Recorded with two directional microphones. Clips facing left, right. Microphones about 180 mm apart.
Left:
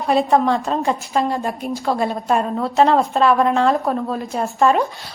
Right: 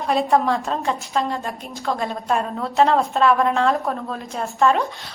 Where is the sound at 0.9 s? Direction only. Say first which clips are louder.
Left 2 dB; 15° left (ahead or behind).